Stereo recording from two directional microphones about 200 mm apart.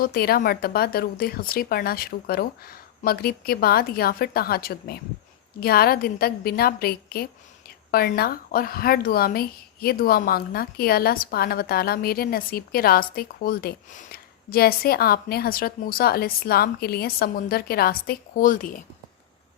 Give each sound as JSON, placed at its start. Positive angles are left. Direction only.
{"t": 0.0, "sound": "speech", "side_deg": 50}